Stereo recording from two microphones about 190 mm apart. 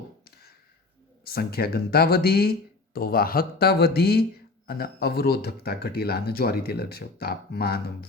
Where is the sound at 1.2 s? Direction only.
55° left (ahead or behind).